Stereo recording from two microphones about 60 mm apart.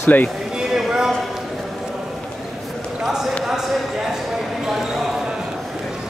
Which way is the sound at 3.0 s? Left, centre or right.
Centre.